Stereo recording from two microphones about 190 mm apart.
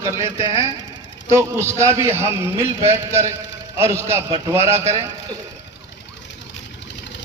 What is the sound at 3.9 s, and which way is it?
A man's voice, 10° right (ahead or behind).